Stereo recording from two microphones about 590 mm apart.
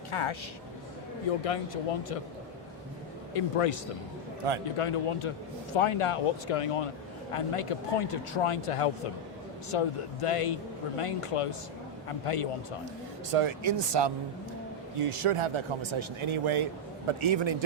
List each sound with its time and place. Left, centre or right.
0.1 s speech: left
1.5 s speech: left
3.3 s speech: left
4.8 s speech: left
13.3 s speech: right
14.9 s speech: right